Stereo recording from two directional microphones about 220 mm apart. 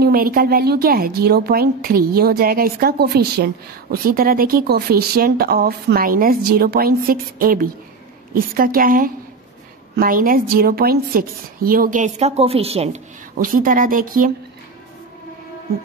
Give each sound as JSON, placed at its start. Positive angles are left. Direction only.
{"t": 0.0, "sound": "a woman's voice", "side_deg": -40}